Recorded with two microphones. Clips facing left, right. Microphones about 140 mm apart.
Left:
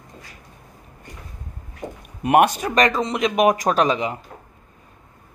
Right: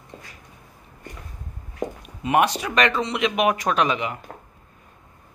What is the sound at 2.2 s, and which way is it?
Speech, 50° left (ahead or behind).